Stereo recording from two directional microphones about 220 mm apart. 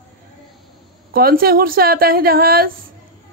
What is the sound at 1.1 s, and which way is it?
A woman's voice, 40° right (ahead or behind).